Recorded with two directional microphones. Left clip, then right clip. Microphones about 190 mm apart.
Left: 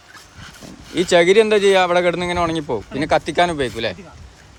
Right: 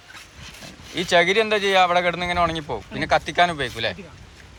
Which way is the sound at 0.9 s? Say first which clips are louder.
Left 5 dB; 25° left (ahead or behind).